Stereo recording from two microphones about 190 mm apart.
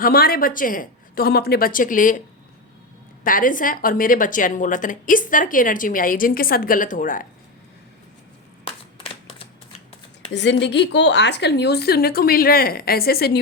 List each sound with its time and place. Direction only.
0.0 s a woman's voice: 55° left (ahead or behind)
3.2 s a woman's voice: 45° left (ahead or behind)
10.3 s speech: 70° left (ahead or behind)